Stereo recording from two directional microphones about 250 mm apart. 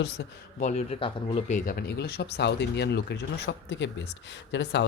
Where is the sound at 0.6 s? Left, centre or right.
Left.